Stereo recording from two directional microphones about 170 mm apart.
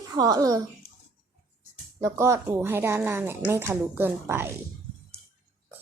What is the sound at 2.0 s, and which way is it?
Speech, 15° right (ahead or behind).